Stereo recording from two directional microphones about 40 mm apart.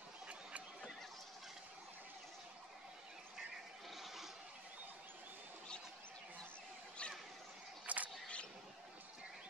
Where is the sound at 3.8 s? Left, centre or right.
Centre.